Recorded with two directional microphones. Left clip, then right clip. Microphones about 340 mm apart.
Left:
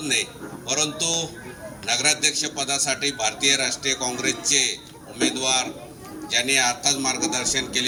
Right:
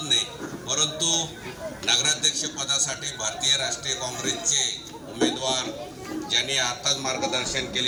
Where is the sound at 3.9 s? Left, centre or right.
Left.